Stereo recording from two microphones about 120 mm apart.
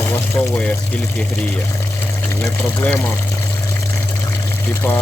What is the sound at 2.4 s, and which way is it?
Speech, 10° left (ahead or behind).